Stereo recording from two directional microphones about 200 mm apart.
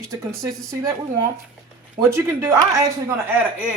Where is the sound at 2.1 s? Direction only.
15° right (ahead or behind).